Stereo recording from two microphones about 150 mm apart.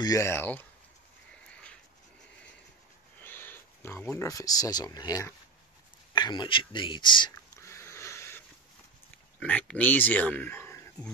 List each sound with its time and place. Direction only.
0.0 s speech: 20° left (ahead or behind)
3.3 s speech: 15° left (ahead or behind); by 7.3 s 30° left (ahead or behind)
7.6 s sniff: 20° left (ahead or behind)
9.4 s speech: 10° left (ahead or behind)